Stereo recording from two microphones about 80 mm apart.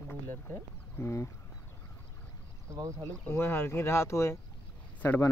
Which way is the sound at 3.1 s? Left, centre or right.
Left.